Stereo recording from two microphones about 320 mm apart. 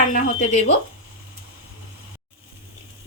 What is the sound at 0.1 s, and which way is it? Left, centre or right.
Speech, left.